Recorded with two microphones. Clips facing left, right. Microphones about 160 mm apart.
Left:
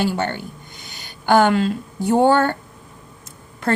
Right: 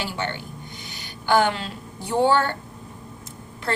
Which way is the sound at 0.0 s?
50° left (ahead or behind).